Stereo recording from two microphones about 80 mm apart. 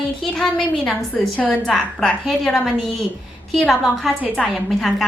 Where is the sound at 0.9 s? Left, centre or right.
Centre.